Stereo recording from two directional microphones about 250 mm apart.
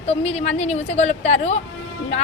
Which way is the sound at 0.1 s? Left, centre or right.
Left.